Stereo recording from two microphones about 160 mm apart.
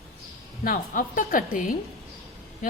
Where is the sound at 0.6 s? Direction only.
60° left (ahead or behind).